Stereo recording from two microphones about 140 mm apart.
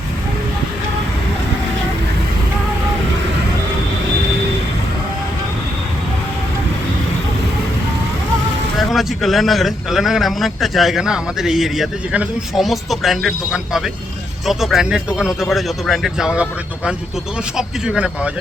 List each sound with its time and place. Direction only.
8.9 s a man's voice: centre (ahead or behind)